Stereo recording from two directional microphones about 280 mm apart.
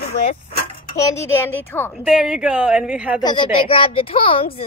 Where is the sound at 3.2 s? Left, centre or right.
Centre.